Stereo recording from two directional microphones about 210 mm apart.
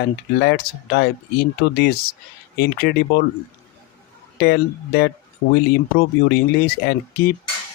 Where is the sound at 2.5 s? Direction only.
50° left (ahead or behind).